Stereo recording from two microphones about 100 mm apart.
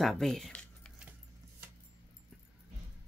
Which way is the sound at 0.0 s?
Centre (ahead or behind).